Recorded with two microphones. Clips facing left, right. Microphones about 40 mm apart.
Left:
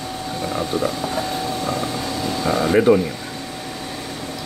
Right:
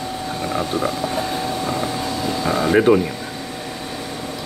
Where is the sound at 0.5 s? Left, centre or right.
Centre.